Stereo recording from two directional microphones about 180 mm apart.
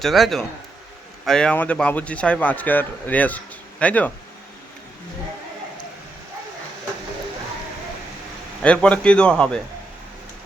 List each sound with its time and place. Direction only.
0.0 s a man's voice: centre (ahead or behind)
8.6 s a man's voice: 5° left (ahead or behind)